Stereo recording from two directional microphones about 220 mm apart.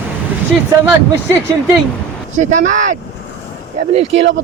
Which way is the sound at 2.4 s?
35° right (ahead or behind).